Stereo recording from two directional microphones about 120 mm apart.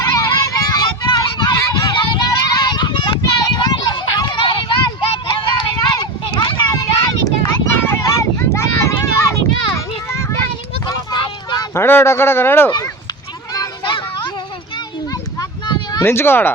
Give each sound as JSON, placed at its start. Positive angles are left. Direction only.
{"t": 0.0, "sound": "a sound", "side_deg": 25}
{"t": 10.8, "sound": "vehicle", "side_deg": 35}
{"t": 11.7, "sound": "speech", "side_deg": 20}
{"t": 13.5, "sound": "children playing", "side_deg": 30}
{"t": 15.4, "sound": "a sound", "side_deg": 35}
{"t": 16.0, "sound": "speech", "side_deg": 20}